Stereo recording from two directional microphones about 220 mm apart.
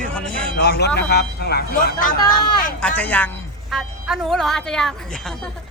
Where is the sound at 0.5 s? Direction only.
45° left (ahead or behind).